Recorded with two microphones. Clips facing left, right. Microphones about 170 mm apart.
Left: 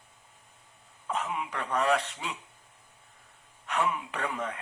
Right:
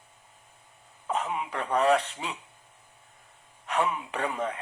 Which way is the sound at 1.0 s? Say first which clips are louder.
Right 2 dB; 30° right (ahead or behind).